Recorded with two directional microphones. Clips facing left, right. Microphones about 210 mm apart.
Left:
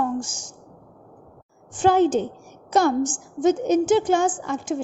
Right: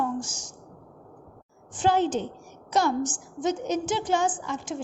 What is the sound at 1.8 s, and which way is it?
A woman's voice, 50° left (ahead or behind).